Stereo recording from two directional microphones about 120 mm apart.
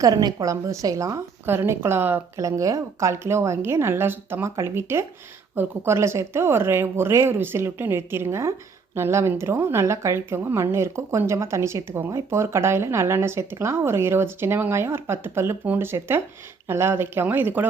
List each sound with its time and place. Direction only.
0.0 s speech: 35° right (ahead or behind); by 17.7 s 15° right (ahead or behind)